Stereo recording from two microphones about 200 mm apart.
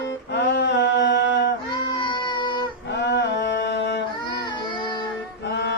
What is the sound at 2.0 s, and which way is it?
Music, 25° left (ahead or behind).